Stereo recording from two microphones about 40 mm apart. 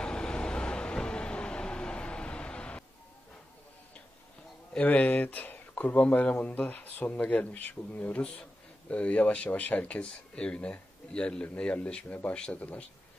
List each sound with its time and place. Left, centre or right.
0.0 s vehicle: left
4.7 s speech: left
5.9 s speech: left